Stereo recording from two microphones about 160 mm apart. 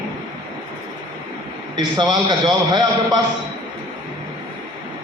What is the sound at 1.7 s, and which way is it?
A man's voice, 25° right (ahead or behind).